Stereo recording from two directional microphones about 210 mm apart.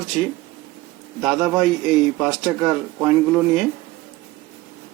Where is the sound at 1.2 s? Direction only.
5° right (ahead or behind).